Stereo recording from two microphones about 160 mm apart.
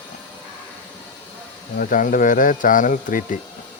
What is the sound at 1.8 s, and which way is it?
Speech, 60° left (ahead or behind).